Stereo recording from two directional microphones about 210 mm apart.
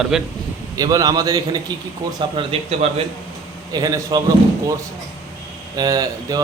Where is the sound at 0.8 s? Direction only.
15° right (ahead or behind).